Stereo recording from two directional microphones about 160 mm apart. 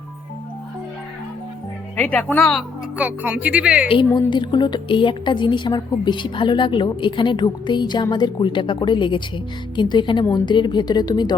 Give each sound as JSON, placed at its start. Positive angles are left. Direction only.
{"t": 2.0, "sound": "speech", "side_deg": 10}
{"t": 3.0, "sound": "speech", "side_deg": -10}
{"t": 3.8, "sound": "a woman's voice", "side_deg": 30}